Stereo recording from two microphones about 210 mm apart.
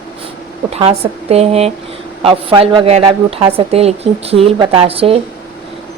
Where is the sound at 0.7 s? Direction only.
30° right (ahead or behind).